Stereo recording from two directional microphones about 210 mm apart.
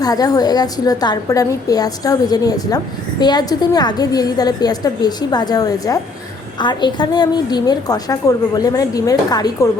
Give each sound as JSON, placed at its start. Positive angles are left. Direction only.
{"t": 0.0, "sound": "a woman's voice", "side_deg": 15}